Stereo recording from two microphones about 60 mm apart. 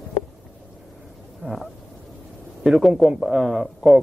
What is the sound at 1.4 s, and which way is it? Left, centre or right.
Frog, centre.